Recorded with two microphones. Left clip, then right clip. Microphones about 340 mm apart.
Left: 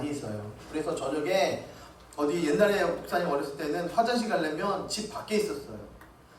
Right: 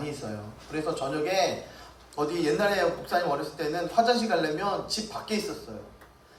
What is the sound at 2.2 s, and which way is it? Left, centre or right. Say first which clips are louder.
A man's voice: left 1 dB; centre.